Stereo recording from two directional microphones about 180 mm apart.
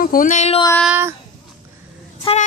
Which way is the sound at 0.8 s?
10° right (ahead or behind).